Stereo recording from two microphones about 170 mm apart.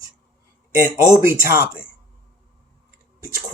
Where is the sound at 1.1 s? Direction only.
15° right (ahead or behind).